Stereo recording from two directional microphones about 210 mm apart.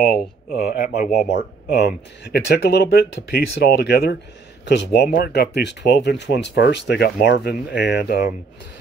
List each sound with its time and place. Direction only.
0.7 s speech: 40° left (ahead or behind)
1.3 s speech: 55° left (ahead or behind)